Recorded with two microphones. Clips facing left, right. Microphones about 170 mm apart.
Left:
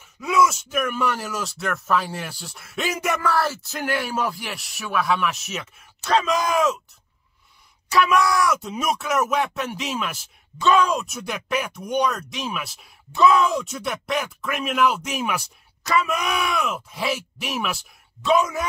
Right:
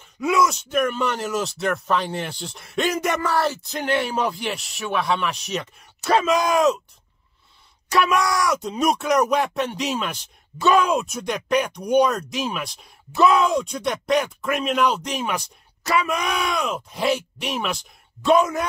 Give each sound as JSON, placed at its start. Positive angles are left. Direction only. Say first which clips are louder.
{"t": 0.2, "sound": "speech", "louder": "even", "side_deg": 0}
{"t": 8.0, "sound": "speech", "louder": "left 2 dB", "side_deg": 0}